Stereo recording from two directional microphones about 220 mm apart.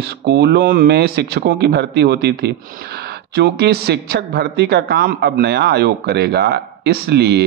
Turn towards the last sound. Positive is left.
turn(degrees=-45)  # may be behind; listen again after turning